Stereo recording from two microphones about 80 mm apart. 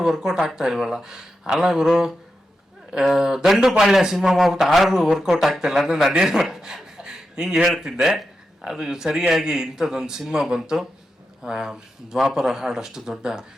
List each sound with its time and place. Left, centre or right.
0.0 s a man's voice: centre